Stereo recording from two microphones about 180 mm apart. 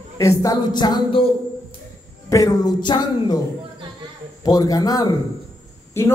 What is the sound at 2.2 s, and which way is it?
A man's voice, 20° left (ahead or behind).